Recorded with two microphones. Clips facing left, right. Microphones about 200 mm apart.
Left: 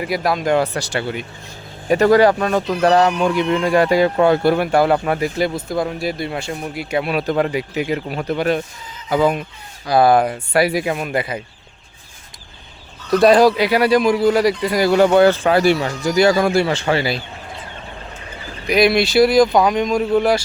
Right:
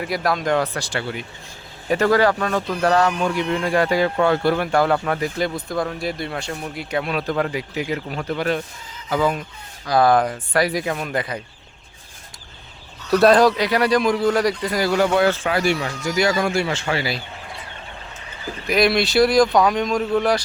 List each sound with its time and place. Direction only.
0.0 s speech: 5° left (ahead or behind)
1.9 s a man's voice: 15° left (ahead or behind)
6.0 s a man's voice: 5° left (ahead or behind)
13.1 s a man's voice: centre (ahead or behind); by 14.9 s 15° left (ahead or behind)
14.9 s speech: 30° left (ahead or behind)
18.7 s speech: centre (ahead or behind)